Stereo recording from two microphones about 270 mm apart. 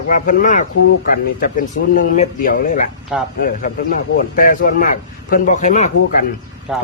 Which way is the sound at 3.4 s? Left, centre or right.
Left.